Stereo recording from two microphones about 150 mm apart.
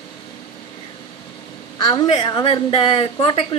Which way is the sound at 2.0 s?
45° left (ahead or behind).